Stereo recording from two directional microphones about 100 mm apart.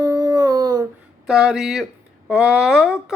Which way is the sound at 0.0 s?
40° right (ahead or behind).